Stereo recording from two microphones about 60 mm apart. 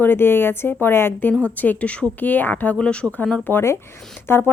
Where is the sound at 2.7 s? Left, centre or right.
Centre.